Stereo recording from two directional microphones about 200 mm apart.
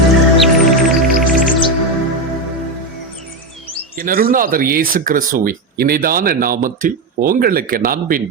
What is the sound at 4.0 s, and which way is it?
Speech, 45° right (ahead or behind).